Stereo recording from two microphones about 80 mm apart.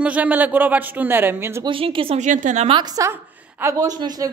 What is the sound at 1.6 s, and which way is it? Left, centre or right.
Speech, right.